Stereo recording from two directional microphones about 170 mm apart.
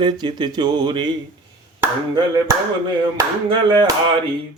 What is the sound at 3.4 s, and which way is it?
Speech, 25° right (ahead or behind).